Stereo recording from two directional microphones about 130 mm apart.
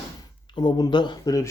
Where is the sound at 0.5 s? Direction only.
35° left (ahead or behind).